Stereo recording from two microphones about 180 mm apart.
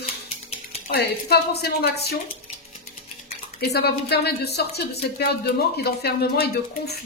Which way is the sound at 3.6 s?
60° left (ahead or behind).